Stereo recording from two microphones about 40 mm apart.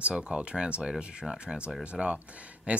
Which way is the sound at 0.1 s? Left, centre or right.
Right.